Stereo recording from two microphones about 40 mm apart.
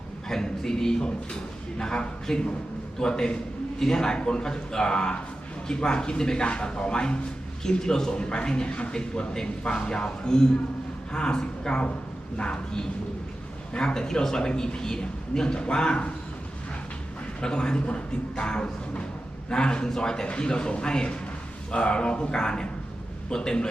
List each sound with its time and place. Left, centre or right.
0.3 s a man's voice: centre
17.4 s speech: left